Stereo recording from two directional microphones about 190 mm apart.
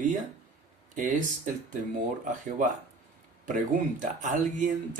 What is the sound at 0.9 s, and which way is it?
Speech, 40° right (ahead or behind).